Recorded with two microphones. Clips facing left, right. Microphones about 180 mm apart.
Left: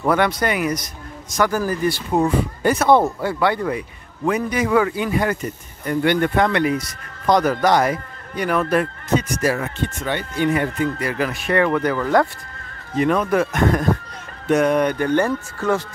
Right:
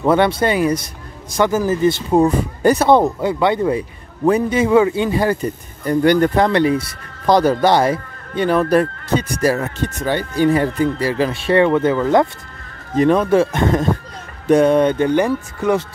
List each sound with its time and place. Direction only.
0.0 s speech: 25° right (ahead or behind)
2.2 s speech: 40° right (ahead or behind)
2.9 s speech: 20° right (ahead or behind)
12.9 s speech: 35° right (ahead or behind); by 15.8 s 15° right (ahead or behind)